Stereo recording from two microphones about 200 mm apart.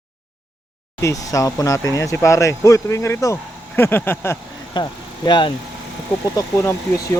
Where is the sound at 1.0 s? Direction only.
15° left (ahead or behind).